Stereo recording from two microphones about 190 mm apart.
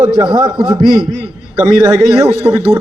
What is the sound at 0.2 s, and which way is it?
Speech, 20° right (ahead or behind).